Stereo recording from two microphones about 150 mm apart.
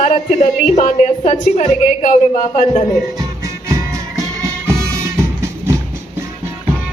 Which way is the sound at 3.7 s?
20° right (ahead or behind).